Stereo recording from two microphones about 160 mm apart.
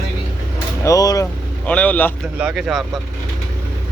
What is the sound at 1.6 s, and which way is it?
Speech, 10° left (ahead or behind).